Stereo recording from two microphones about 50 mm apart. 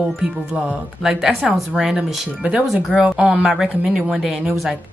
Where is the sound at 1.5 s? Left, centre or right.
Centre.